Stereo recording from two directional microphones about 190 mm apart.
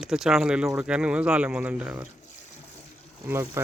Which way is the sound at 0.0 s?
Centre (ahead or behind).